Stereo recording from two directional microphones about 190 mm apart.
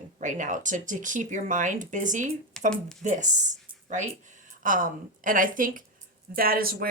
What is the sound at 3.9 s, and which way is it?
A woman's voice, 40° right (ahead or behind).